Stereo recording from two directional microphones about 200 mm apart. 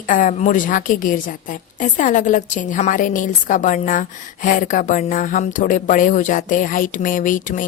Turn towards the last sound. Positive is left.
turn(degrees=40)  # may be behind; listen again after turning